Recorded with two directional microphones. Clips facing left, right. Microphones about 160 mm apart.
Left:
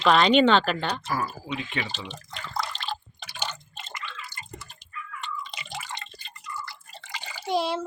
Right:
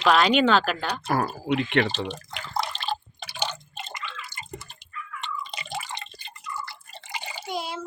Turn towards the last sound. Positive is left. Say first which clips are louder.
# left 6 dB
turn(degrees=30)  # may be behind; listen again after turning